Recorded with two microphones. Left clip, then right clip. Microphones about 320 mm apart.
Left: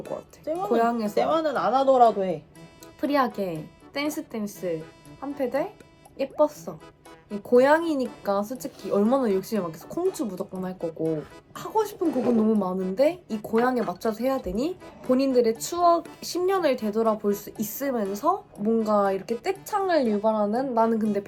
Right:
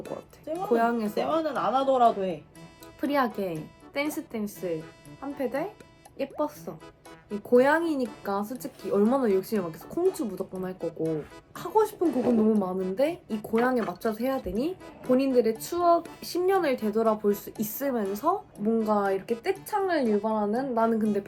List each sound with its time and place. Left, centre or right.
0.0 s music: centre
0.5 s speech: centre
1.1 s speech: left
3.0 s speech: centre